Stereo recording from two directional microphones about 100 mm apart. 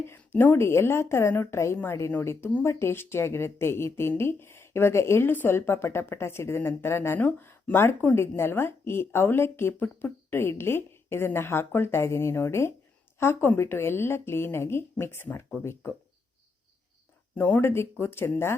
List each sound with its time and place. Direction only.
0.3 s speech: 20° left (ahead or behind)
17.3 s speech: 20° left (ahead or behind)